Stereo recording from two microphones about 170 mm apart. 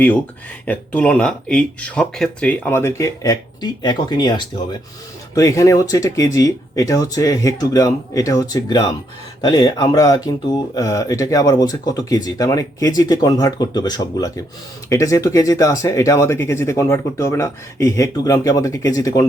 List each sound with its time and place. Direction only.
0.6 s speech: 5° left (ahead or behind)